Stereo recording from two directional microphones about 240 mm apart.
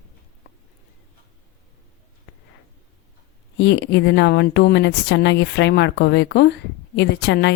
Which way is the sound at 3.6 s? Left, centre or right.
Left.